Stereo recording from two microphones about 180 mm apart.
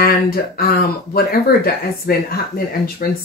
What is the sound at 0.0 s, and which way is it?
Speech, 55° left (ahead or behind).